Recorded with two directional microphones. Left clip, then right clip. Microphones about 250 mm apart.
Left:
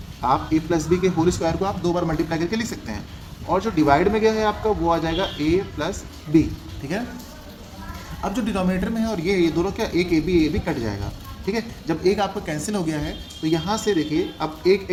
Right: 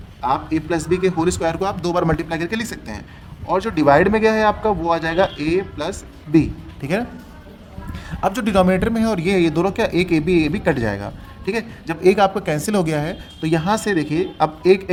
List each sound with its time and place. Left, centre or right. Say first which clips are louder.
0.2 s speech: even; right
8.2 s speech: right 8 dB; right